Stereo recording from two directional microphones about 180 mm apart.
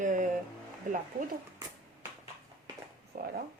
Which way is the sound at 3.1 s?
55° right (ahead or behind).